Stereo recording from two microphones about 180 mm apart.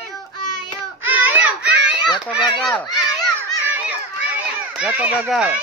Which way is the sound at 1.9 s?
25° left (ahead or behind).